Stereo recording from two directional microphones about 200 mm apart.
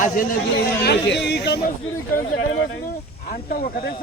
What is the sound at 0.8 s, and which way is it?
Speech, 60° left (ahead or behind).